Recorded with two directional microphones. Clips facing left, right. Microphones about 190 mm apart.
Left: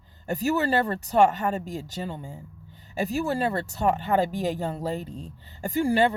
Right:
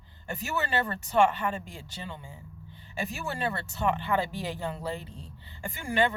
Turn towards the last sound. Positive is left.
turn(degrees=35)  # may be behind; listen again after turning